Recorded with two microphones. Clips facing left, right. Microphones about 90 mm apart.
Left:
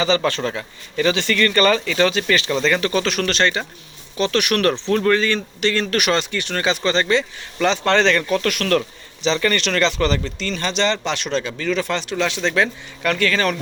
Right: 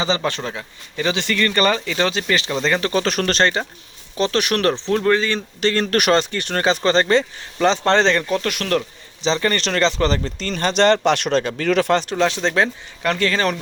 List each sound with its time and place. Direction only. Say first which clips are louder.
0.2 s speech: left 3 dB; 15° right (ahead or behind)
5.5 s speech: right 4 dB; 40° right (ahead or behind); by 11.9 s 60° right (ahead or behind)
11.9 s speech: right 3 dB; 40° right (ahead or behind)